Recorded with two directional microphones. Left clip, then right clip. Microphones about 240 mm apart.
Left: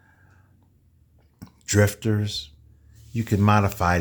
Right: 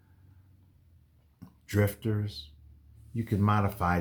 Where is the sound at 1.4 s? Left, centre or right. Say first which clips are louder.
Left 9 dB; left.